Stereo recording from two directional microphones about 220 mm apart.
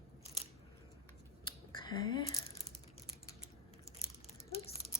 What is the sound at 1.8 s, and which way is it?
Speech, 20° left (ahead or behind).